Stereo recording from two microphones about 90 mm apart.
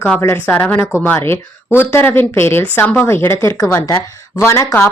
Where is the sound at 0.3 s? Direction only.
20° left (ahead or behind).